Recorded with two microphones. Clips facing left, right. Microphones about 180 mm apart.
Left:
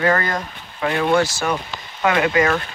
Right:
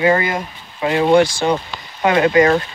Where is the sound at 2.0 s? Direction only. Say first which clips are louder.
Right 5 dB; 30° right (ahead or behind).